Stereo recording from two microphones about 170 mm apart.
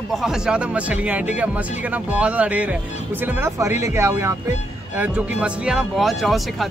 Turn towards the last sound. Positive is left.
turn(degrees=0)  # may be behind; listen again after turning